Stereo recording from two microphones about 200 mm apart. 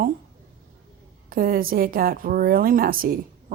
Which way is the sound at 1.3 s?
45° right (ahead or behind).